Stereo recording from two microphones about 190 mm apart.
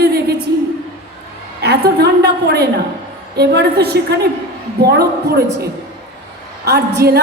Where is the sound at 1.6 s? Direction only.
60° right (ahead or behind).